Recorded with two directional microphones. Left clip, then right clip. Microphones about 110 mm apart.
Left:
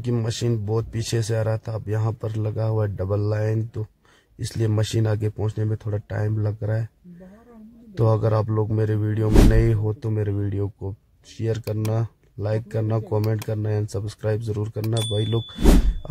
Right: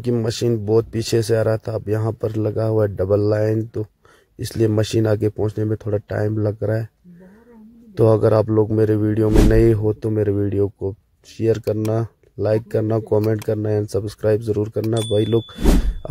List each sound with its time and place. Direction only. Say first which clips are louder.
0.1 s speech: right 6 dB; 30° right (ahead or behind)
7.9 s a man's voice: right 8 dB; 30° right (ahead or behind)
15.6 s speech: even; centre (ahead or behind)